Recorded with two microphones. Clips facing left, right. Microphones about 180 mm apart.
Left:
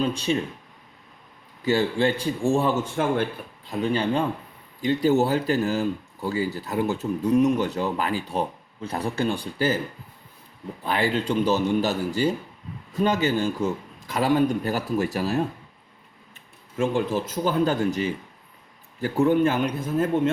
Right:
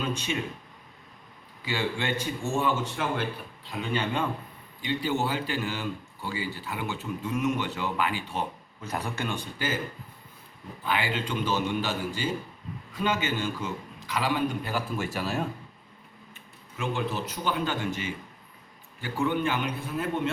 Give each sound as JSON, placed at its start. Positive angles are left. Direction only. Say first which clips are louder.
{"t": 0.0, "sound": "speech", "louder": "left 7 dB", "side_deg": 35}
{"t": 1.6, "sound": "speech", "louder": "left 8 dB", "side_deg": 40}
{"t": 3.7, "sound": "speech", "louder": "left 6 dB", "side_deg": 35}
{"t": 10.8, "sound": "speech", "louder": "left 6 dB", "side_deg": 40}
{"t": 16.7, "sound": "speech", "louder": "left 7 dB", "side_deg": 40}
{"t": 19.2, "sound": "speech", "louder": "left 7 dB", "side_deg": 40}